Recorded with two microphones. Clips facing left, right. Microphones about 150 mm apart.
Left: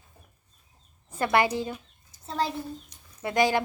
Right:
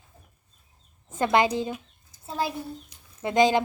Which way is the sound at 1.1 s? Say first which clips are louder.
Right 2 dB; 20° right (ahead or behind).